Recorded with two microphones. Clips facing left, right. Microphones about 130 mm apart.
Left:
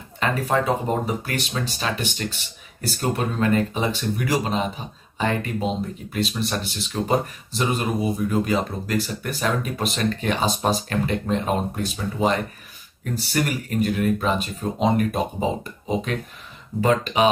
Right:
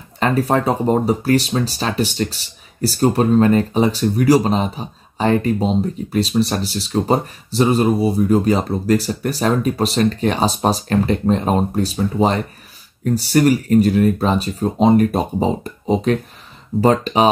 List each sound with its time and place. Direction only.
0.2 s speech: 35° right (ahead or behind)